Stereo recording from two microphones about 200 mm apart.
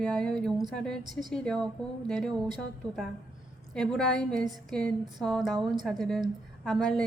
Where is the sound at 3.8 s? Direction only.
Centre (ahead or behind).